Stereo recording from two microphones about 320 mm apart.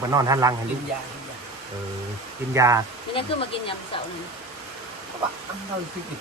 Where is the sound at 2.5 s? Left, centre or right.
Centre.